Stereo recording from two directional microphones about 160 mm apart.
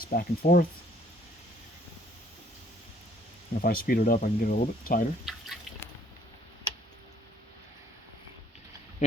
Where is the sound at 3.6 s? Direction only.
65° left (ahead or behind).